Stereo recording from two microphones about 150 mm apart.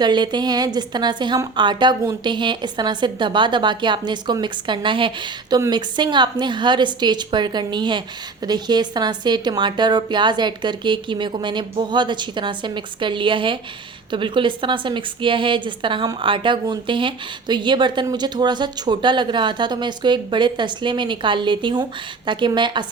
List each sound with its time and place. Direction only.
0.0 s a woman's voice: 30° right (ahead or behind)